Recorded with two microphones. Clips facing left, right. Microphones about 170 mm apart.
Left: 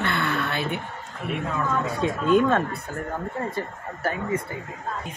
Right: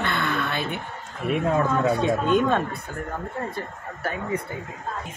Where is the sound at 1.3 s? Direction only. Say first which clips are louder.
Right 5 dB; 45° right (ahead or behind).